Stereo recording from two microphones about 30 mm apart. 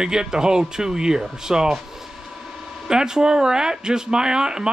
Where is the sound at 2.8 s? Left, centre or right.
Centre.